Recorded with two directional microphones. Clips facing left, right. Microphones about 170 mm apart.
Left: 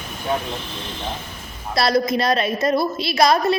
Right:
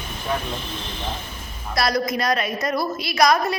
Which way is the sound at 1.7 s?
30° left (ahead or behind).